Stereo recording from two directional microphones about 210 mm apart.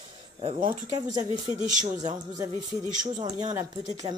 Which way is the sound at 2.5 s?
20° left (ahead or behind).